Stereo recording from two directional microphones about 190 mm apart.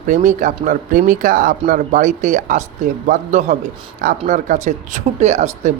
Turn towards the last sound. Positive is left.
turn(degrees=-35)  # may be behind; listen again after turning